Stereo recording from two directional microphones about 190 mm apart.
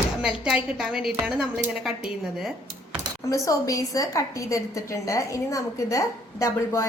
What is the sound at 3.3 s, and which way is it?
A woman's voice, 15° left (ahead or behind).